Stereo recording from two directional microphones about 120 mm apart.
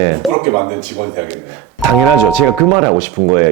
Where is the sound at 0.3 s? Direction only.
25° right (ahead or behind).